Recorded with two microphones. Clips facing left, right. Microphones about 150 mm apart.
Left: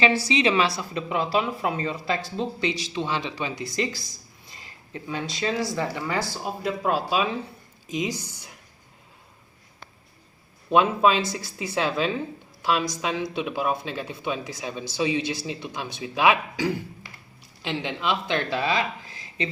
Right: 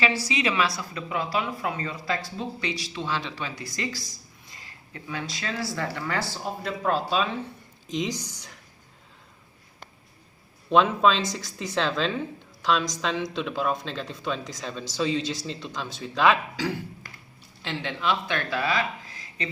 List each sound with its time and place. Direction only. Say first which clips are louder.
0.0 s speech: left 4 dB; 25° left (ahead or behind); by 8.1 s 5° left (ahead or behind)
10.7 s speech: left 1 dB; 10° left (ahead or behind); by 19.5 s 25° left (ahead or behind)